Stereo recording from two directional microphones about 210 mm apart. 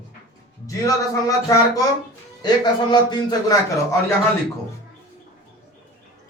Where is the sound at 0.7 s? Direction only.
15° left (ahead or behind).